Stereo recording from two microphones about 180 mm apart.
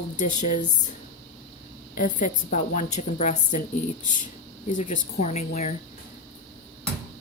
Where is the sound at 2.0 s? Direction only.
45° left (ahead or behind).